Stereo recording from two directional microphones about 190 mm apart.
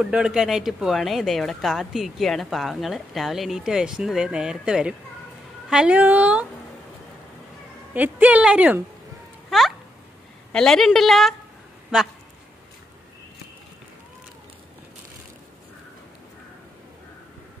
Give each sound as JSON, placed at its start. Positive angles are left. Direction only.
{"t": 0.0, "sound": "a woman's voice", "side_deg": -5}
{"t": 7.9, "sound": "a woman's voice", "side_deg": -10}